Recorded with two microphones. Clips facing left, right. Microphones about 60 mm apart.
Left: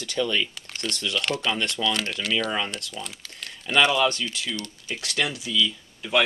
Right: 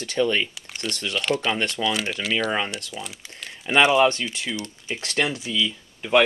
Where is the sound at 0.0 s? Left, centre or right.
Right; by 3.1 s centre.